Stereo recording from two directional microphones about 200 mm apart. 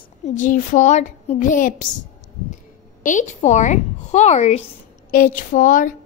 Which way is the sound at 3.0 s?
40° left (ahead or behind).